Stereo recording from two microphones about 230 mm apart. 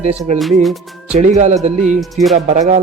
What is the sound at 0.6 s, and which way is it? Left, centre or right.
Speech, centre.